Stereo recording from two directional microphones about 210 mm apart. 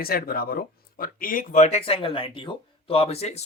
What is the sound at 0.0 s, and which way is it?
Speech, 45° left (ahead or behind).